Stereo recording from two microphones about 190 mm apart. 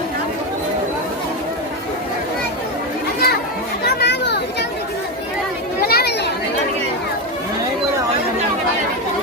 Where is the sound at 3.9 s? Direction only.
60° left (ahead or behind).